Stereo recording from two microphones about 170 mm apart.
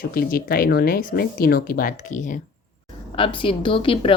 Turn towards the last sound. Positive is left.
turn(degrees=30)  # may be behind; listen again after turning